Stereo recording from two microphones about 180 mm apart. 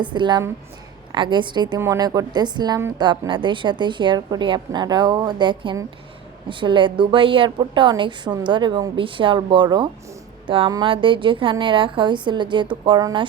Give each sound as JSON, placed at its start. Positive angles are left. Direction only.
{"t": 0.0, "sound": "a woman's voice", "side_deg": -25}